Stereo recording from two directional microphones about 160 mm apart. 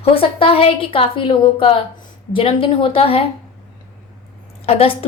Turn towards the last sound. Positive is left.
turn(degrees=35)  # may be behind; listen again after turning